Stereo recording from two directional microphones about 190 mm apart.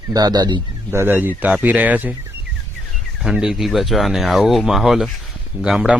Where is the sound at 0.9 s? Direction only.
10° right (ahead or behind).